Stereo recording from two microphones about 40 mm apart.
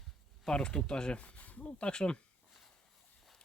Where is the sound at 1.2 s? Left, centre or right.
Left.